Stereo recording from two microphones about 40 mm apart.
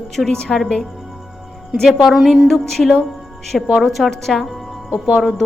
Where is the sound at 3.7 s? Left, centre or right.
Centre.